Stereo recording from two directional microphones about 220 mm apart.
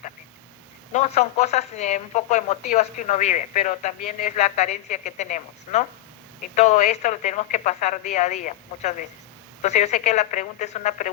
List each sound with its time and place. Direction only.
0.9 s speech: 30° left (ahead or behind)